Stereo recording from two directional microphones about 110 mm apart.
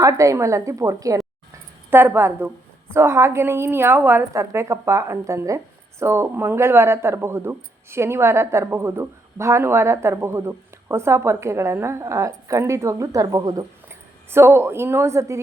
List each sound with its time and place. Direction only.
0.0 s speech: 30° right (ahead or behind)
1.9 s speech: 20° right (ahead or behind); by 13.7 s 35° right (ahead or behind)
13.8 s speech: 20° right (ahead or behind)